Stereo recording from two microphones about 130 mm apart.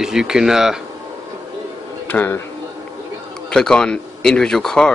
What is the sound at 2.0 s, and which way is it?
Speech, 15° left (ahead or behind).